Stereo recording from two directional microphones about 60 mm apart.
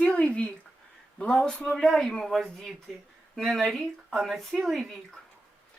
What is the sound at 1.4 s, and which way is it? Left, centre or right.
Speech, centre.